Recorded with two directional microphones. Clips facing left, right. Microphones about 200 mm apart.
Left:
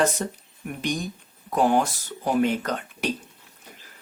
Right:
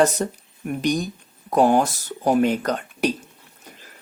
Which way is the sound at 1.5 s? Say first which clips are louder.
Right 4 dB; 40° right (ahead or behind).